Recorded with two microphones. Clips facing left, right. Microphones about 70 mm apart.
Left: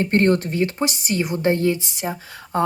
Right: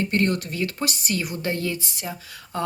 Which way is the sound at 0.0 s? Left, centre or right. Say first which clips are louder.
Left 5 dB; left.